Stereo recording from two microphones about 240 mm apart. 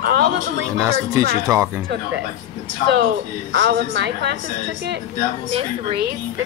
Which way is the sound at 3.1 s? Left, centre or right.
Right.